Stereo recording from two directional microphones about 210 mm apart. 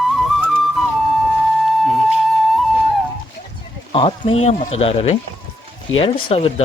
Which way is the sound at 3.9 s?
25° left (ahead or behind).